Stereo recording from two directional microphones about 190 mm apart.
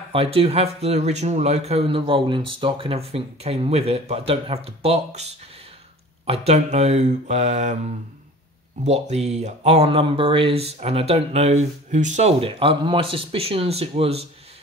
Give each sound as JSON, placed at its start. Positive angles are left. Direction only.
{"t": 0.1, "sound": "speech", "side_deg": -30}
{"t": 8.8, "sound": "speech", "side_deg": -35}